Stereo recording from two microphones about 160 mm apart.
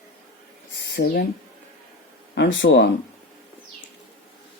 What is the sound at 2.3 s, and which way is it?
Speech, 90° left.